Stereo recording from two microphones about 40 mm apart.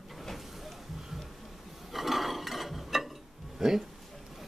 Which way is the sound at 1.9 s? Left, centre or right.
Centre.